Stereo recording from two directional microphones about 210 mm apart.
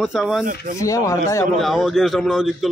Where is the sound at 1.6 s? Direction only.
Centre (ahead or behind).